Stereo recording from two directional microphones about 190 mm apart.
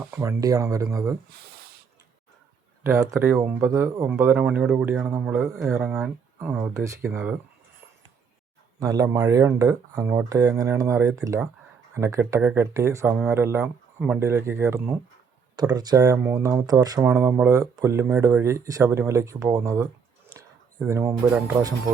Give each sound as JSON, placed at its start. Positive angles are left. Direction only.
{"t": 0.2, "sound": "speech", "side_deg": -15}
{"t": 2.8, "sound": "speech", "side_deg": -15}
{"t": 6.6, "sound": "speech", "side_deg": -15}
{"t": 8.8, "sound": "speech", "side_deg": -20}
{"t": 20.3, "sound": "a sound", "side_deg": -15}